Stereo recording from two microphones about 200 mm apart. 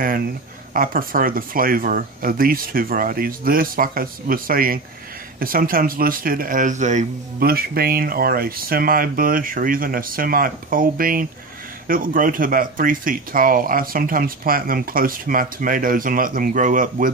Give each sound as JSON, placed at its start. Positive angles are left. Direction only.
{"t": 0.7, "sound": "speech", "side_deg": -45}